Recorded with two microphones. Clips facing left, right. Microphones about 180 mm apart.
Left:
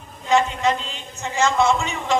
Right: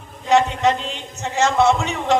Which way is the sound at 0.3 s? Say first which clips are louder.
Right 3 dB; 70° right (ahead or behind).